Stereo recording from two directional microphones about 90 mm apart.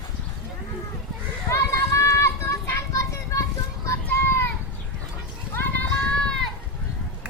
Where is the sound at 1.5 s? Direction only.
35° left (ahead or behind).